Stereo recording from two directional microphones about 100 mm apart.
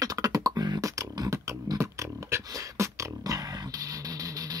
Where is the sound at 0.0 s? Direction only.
40° right (ahead or behind).